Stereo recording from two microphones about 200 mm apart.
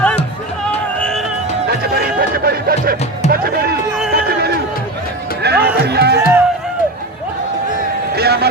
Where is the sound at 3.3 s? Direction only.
50° right (ahead or behind).